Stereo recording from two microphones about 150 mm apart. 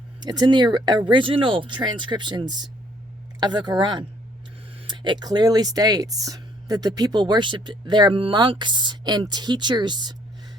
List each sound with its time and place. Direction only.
0.2 s speech: 25° right (ahead or behind)